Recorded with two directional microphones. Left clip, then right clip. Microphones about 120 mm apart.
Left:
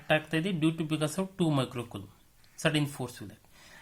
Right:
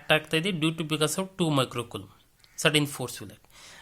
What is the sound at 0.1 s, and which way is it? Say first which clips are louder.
Speech: right 4 dB; 30° right (ahead or behind).